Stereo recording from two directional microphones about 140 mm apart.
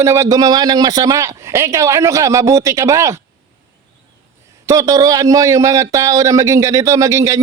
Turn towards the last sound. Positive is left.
turn(degrees=-20)  # may be behind; listen again after turning